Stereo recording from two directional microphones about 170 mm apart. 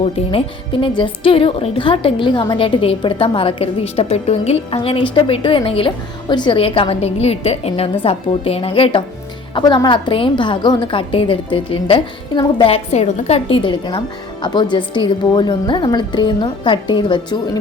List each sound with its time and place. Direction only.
0.0 s a woman's voice: 35° left (ahead or behind)